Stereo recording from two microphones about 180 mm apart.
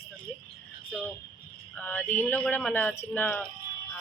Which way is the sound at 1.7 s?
10° left (ahead or behind).